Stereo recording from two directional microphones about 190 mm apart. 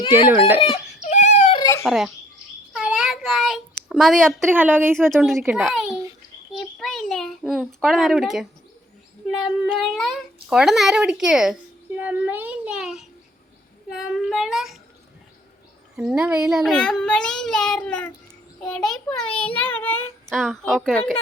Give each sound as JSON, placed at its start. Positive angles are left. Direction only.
{"t": 0.3, "sound": "a woman's voice", "side_deg": -10}
{"t": 1.0, "sound": "a sound", "side_deg": 40}
{"t": 1.5, "sound": "a sound", "side_deg": 20}
{"t": 1.8, "sound": "speech", "side_deg": 0}
{"t": 2.7, "sound": "child singing", "side_deg": -5}
{"t": 3.8, "sound": "speech", "side_deg": 0}
{"t": 4.4, "sound": "a woman's voice", "side_deg": -10}
{"t": 4.9, "sound": "speech", "side_deg": 0}
{"t": 6.5, "sound": "child singing", "side_deg": 0}
{"t": 9.3, "sound": "a child's voice", "side_deg": 0}
{"t": 16.0, "sound": "a child's voice", "side_deg": -5}
{"t": 20.3, "sound": "speech", "side_deg": 0}